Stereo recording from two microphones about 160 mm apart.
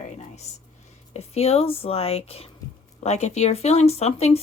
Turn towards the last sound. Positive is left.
turn(degrees=40)  # may be behind; listen again after turning